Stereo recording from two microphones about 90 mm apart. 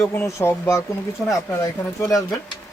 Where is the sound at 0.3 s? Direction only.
30° left (ahead or behind).